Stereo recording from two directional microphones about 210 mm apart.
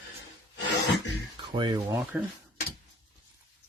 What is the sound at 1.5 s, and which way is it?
Speech, 20° right (ahead or behind).